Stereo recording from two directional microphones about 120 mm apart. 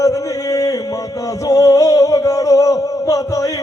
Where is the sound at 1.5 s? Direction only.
30° left (ahead or behind).